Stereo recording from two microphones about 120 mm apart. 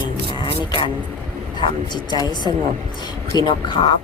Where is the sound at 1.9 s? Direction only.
35° left (ahead or behind).